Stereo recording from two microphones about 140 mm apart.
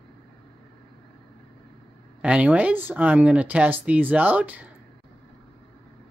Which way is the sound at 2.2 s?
10° right (ahead or behind).